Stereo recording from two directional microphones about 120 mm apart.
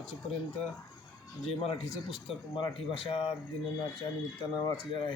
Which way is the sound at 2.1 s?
40° left (ahead or behind).